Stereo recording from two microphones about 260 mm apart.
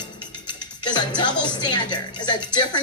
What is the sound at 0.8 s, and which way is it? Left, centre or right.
Speech, centre.